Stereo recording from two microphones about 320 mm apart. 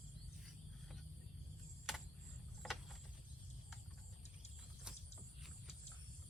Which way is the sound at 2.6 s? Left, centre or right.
Centre.